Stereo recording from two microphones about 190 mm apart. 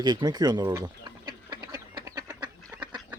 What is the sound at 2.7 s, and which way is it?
Duck, 10° right (ahead or behind).